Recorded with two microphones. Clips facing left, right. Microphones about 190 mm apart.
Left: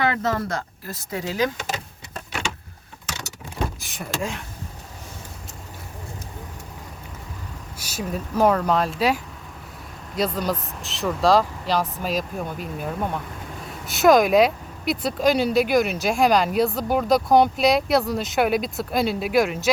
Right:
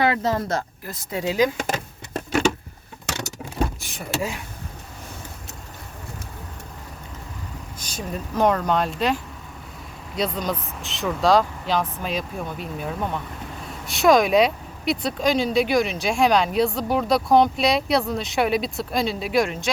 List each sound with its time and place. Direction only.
0.1 s speech: 25° right (ahead or behind)
1.5 s speech: 50° right (ahead or behind)
3.8 s speech: centre (ahead or behind)
7.8 s speech: 5° left (ahead or behind)